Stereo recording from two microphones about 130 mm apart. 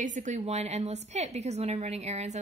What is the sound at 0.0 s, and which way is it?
A woman's voice, 75° right (ahead or behind).